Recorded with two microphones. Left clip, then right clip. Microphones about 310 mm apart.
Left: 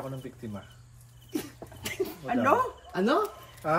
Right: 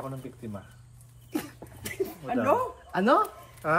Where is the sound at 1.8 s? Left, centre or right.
Centre.